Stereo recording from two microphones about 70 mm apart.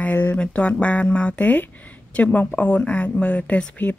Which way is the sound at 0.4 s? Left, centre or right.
Centre.